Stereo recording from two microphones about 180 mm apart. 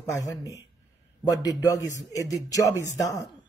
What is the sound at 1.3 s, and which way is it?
Speech, 20° left (ahead or behind).